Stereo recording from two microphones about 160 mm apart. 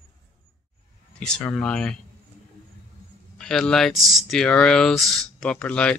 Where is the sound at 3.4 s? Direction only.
5° left (ahead or behind).